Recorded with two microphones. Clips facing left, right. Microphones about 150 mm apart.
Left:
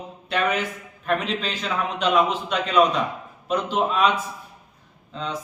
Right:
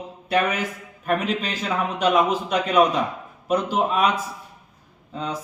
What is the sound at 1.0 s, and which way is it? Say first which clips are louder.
A man's voice: right 1 dB; 10° right (ahead or behind).